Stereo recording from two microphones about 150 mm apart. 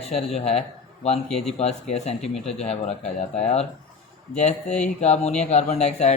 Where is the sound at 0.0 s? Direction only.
45° left (ahead or behind).